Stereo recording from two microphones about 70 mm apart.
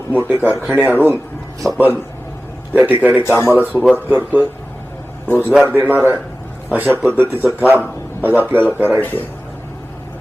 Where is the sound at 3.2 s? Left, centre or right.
Left.